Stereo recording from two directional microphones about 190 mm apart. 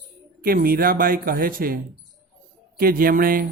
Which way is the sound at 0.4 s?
50° right (ahead or behind).